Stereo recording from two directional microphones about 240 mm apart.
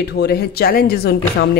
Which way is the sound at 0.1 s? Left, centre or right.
Left.